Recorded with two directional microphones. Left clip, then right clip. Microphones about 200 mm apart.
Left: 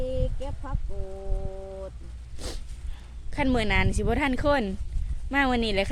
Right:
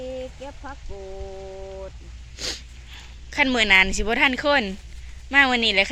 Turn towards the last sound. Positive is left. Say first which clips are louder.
# right 6 dB
turn(degrees=15)  # may be behind; listen again after turning